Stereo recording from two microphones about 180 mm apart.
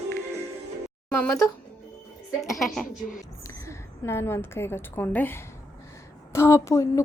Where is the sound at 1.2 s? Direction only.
15° left (ahead or behind).